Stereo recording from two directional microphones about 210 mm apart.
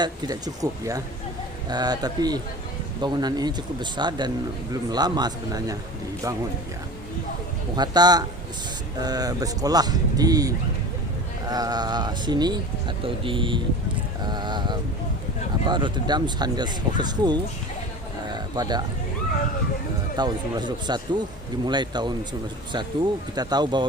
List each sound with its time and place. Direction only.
0.0 s speech: 20° right (ahead or behind)
7.8 s speech: 20° right (ahead or behind)
18.3 s a sound: 20° right (ahead or behind)
20.1 s speech: 20° right (ahead or behind)